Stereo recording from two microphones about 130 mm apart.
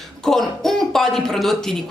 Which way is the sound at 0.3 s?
Centre (ahead or behind).